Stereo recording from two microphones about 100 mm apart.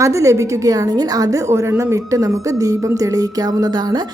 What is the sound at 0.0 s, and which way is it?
Speech, 30° right (ahead or behind).